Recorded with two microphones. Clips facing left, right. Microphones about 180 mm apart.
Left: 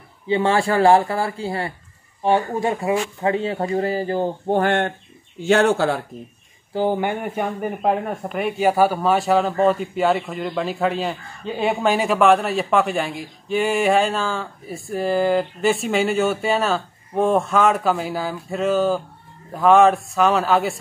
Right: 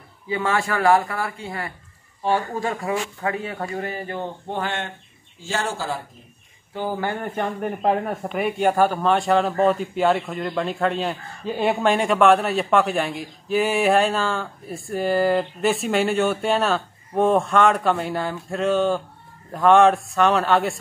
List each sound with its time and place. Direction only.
0.3 s speech: 30° left (ahead or behind)
2.2 s speech: 20° left (ahead or behind)
4.5 s speech: 55° left (ahead or behind)
6.7 s speech: 25° left (ahead or behind); by 20.8 s centre (ahead or behind)